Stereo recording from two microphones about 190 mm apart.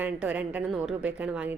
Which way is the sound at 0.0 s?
5° right (ahead or behind).